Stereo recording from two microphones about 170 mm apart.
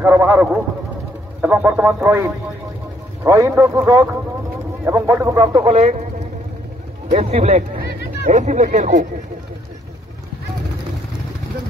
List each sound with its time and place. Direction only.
0.0 s a man's voice: 10° right (ahead or behind)
5.6 s speech: 40° right (ahead or behind)